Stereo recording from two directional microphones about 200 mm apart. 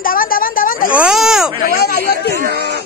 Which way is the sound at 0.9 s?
5° right (ahead or behind).